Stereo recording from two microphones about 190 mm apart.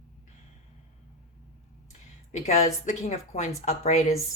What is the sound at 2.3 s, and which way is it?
Speech, 35° left (ahead or behind).